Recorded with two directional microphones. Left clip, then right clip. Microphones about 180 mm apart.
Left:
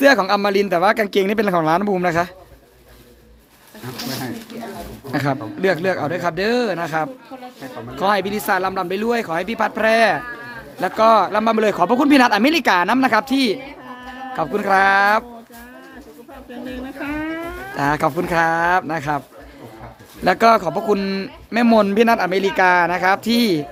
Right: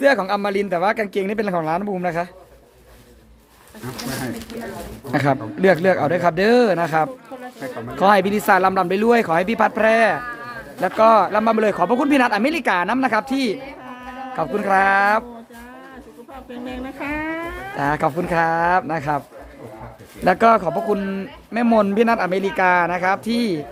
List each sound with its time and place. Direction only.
0.0 s speech: 20° left (ahead or behind)
5.1 s speech: 15° right (ahead or behind)
9.8 s speech: centre (ahead or behind)
16.6 s speech: 10° right (ahead or behind)
17.7 s speech: 5° left (ahead or behind)
20.2 s speech: centre (ahead or behind)